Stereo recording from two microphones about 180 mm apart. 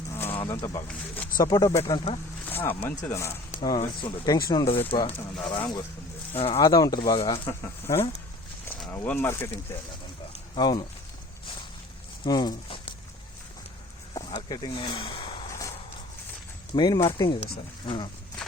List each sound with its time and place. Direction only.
0.2 s a sound: 10° left (ahead or behind)
0.5 s speech: 15° left (ahead or behind)
1.4 s speech: 20° left (ahead or behind)
1.8 s speech: 30° left (ahead or behind)
2.5 s speech: 10° left (ahead or behind)
4.9 s speech: 25° left (ahead or behind)
7.4 s speech: 15° left (ahead or behind)
10.5 s speech: 25° left (ahead or behind)
12.2 s speech: 25° left (ahead or behind)
14.1 s a sound: 25° left (ahead or behind)
14.5 s speech: 25° left (ahead or behind)
15.4 s a sound: 20° left (ahead or behind)
16.7 s speech: 25° left (ahead or behind)